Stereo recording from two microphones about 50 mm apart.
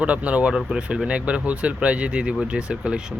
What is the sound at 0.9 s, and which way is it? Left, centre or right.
Speech, right.